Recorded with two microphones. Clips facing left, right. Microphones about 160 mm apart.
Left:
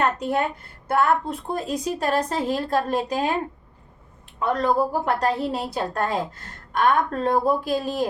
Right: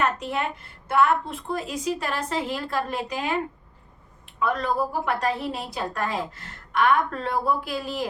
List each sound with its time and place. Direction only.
0.0 s a woman's voice: 40° left (ahead or behind)
4.4 s a woman's voice: 40° left (ahead or behind)